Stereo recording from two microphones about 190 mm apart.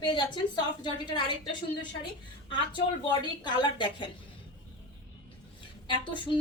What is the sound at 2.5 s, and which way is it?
A woman's voice, 25° left (ahead or behind).